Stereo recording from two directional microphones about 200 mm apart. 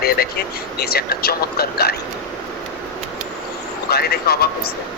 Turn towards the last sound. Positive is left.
turn(degrees=50)  # may be behind; listen again after turning